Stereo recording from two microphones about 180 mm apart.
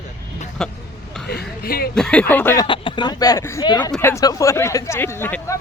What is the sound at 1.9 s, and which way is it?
Speech, 5° left (ahead or behind).